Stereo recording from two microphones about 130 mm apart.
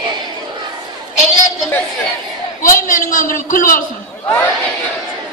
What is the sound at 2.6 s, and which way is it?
A man's voice, 90° left.